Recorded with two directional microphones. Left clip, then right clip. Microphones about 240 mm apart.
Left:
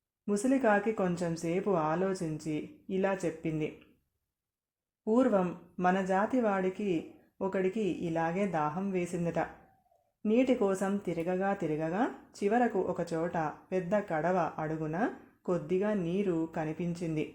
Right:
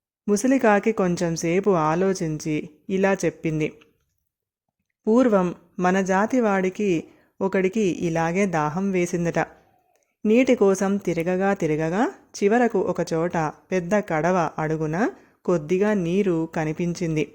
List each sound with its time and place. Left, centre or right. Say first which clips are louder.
0.3 s speech: right 9 dB; right
5.0 s speech: right 9 dB; right